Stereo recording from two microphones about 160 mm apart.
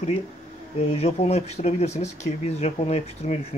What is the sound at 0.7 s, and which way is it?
Speech, 40° left (ahead or behind).